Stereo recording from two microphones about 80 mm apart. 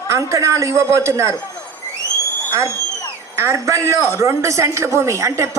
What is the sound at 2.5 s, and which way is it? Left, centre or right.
A woman's voice, right.